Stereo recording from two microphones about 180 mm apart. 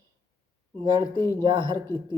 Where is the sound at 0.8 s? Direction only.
25° right (ahead or behind).